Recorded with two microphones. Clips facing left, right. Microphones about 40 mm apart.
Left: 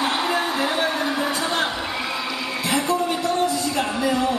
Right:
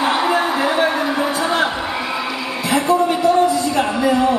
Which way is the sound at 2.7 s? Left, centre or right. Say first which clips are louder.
Right 7 dB; centre.